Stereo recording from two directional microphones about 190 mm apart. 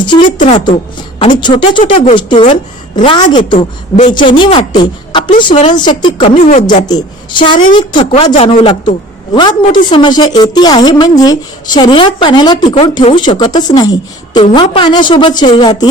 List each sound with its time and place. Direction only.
0.3 s a woman's voice: 40° left (ahead or behind)
1.2 s a man's voice: 25° left (ahead or behind)
6.5 s a woman's voice: 40° left (ahead or behind)
6.8 s a man's voice: 25° left (ahead or behind)
12.6 s a woman's voice: 35° left (ahead or behind)
12.9 s a man's voice: 25° left (ahead or behind)